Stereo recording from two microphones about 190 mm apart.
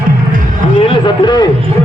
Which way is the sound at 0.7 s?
25° left (ahead or behind).